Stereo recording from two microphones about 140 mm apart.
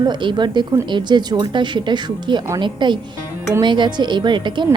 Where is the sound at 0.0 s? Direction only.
35° right (ahead or behind).